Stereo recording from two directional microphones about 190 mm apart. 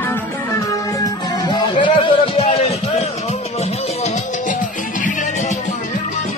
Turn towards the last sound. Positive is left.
turn(degrees=40)  # may be behind; listen again after turning